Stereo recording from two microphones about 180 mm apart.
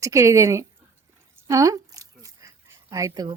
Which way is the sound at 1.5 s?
15° right (ahead or behind).